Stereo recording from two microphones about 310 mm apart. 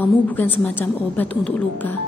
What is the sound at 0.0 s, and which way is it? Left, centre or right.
A woman's voice, centre.